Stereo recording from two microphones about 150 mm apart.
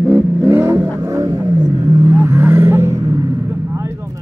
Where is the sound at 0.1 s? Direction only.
15° right (ahead or behind).